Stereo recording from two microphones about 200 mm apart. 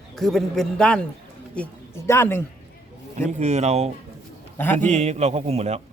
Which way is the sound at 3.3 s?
35° right (ahead or behind).